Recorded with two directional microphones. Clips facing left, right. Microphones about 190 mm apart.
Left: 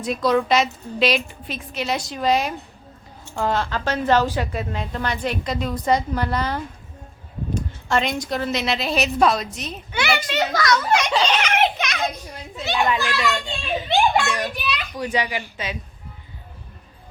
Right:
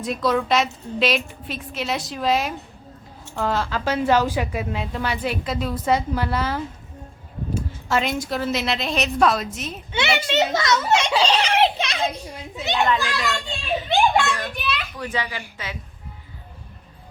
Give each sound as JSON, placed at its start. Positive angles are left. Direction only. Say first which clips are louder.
{"t": 0.0, "sound": "a woman's voice", "louder": "left 2 dB", "side_deg": 0}
{"t": 9.9, "sound": "a child's voice", "louder": "right 2 dB", "side_deg": -25}
{"t": 12.9, "sound": "a woman's voice", "louder": "left 1 dB", "side_deg": 15}
{"t": 14.5, "sound": "a woman's voice", "louder": "even", "side_deg": 0}
{"t": 14.9, "sound": "a woman's voice", "louder": "left 4 dB", "side_deg": 15}